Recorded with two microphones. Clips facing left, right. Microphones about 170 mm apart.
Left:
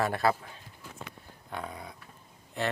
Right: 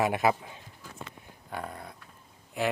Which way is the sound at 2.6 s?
10° right (ahead or behind).